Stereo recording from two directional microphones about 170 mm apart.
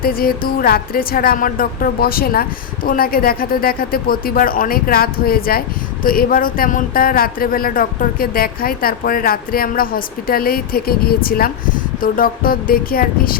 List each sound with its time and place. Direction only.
0.0 s speech: 60° left (ahead or behind)